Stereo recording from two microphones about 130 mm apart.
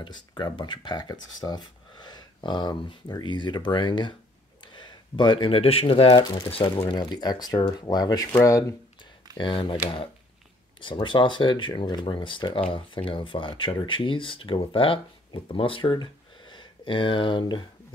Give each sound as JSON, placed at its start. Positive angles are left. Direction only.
{"t": 0.0, "sound": "speech", "side_deg": 35}
{"t": 9.4, "sound": "speech", "side_deg": 40}
{"t": 10.8, "sound": "speech", "side_deg": 40}